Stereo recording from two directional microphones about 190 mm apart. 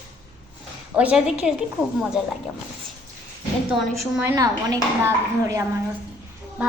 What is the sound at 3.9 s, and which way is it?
A woman's voice, 15° right (ahead or behind).